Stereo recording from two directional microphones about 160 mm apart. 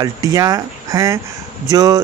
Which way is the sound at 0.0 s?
20° right (ahead or behind).